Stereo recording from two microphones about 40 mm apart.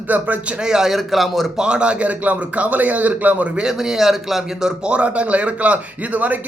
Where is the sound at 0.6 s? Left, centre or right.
Centre.